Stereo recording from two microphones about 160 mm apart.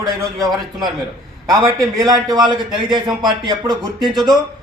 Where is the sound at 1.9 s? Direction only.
20° right (ahead or behind).